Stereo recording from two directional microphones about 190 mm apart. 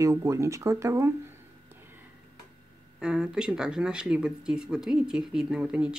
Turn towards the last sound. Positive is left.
turn(degrees=-5)  # may be behind; listen again after turning